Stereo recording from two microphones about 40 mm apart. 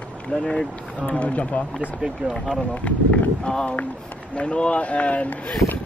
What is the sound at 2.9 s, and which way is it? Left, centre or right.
Speech, left.